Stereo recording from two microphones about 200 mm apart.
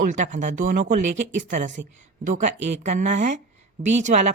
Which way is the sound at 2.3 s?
40° right (ahead or behind).